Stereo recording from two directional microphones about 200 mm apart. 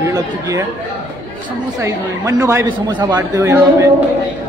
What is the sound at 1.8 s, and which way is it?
A man's voice, 15° right (ahead or behind).